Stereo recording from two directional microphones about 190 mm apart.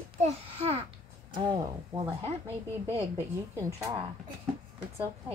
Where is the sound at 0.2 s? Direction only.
30° right (ahead or behind).